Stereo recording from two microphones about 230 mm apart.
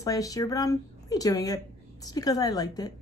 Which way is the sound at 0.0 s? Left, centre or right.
Centre.